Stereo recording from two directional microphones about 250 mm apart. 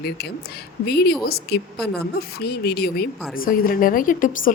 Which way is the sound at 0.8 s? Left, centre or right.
Left.